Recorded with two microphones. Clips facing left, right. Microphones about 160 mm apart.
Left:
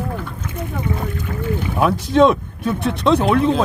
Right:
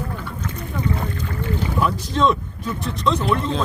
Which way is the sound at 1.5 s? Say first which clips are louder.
Left 4 dB; 60° left (ahead or behind).